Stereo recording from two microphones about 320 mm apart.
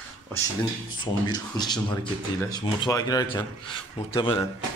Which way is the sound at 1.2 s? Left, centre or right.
Centre.